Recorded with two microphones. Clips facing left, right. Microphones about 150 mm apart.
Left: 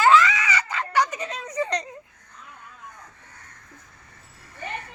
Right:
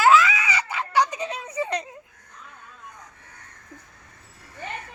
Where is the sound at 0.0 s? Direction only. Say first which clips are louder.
Even; 10° right (ahead or behind).